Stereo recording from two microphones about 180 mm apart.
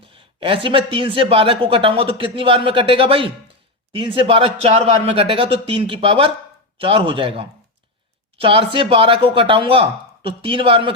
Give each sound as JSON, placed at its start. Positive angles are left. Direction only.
{"t": 0.0, "sound": "speech", "side_deg": -30}